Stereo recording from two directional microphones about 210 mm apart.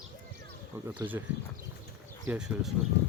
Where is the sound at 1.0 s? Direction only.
20° right (ahead or behind).